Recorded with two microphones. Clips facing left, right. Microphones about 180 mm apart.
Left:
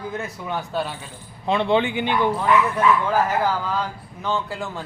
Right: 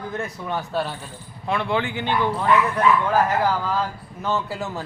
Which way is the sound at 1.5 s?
20° left (ahead or behind).